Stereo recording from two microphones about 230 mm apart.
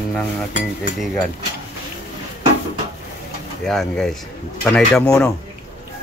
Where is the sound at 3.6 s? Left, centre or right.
Centre.